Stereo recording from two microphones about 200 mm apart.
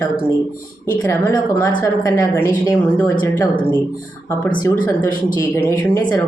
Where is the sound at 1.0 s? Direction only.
15° left (ahead or behind).